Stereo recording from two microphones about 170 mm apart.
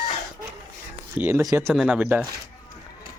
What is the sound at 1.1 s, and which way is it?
Speech, 15° right (ahead or behind).